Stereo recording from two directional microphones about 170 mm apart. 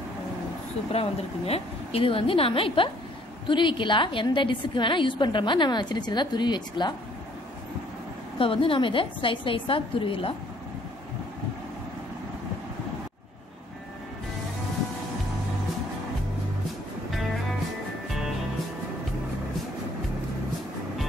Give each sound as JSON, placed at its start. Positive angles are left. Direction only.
{"t": 0.9, "sound": "a woman's voice", "side_deg": 35}
{"t": 8.4, "sound": "a woman's voice", "side_deg": 30}